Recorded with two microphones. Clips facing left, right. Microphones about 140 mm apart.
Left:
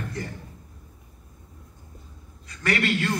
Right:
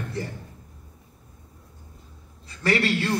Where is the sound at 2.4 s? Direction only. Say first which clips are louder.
Right 2 dB; 30° right (ahead or behind).